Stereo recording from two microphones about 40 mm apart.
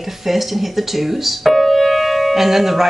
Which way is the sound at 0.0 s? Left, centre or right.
Centre.